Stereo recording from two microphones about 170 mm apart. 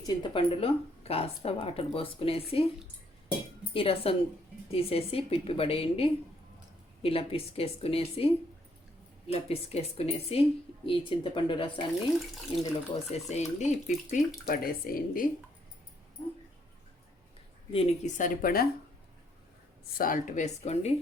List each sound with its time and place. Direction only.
0.0 s speech: 30° left (ahead or behind)
3.7 s speech: 35° left (ahead or behind)
14.4 s speech: 60° left (ahead or behind)
17.7 s speech: 35° left (ahead or behind)
18.2 s speech: 60° left (ahead or behind)
20.0 s speech: 55° left (ahead or behind)